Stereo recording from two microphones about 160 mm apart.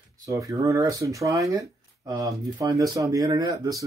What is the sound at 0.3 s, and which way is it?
Speech, 20° right (ahead or behind).